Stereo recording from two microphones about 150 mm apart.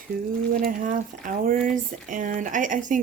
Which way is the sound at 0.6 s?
65° right (ahead or behind).